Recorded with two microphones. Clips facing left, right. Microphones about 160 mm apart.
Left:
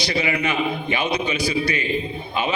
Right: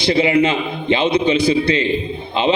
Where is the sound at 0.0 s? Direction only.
25° right (ahead or behind).